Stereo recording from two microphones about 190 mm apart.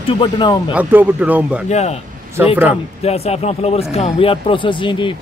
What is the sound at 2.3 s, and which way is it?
Speech, 10° right (ahead or behind).